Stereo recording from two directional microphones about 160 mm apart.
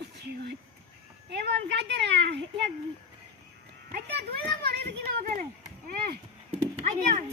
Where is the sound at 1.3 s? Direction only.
90° right.